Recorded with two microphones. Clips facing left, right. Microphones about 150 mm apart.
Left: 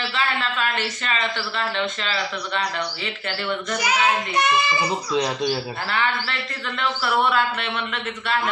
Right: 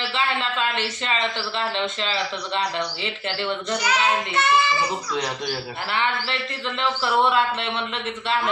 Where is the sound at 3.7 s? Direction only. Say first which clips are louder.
Left 1 dB; 10° left (ahead or behind).